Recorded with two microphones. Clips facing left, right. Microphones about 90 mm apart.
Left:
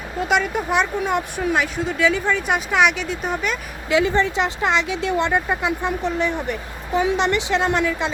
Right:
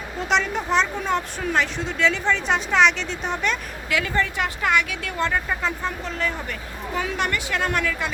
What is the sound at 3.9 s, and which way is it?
Speech, 25° left (ahead or behind).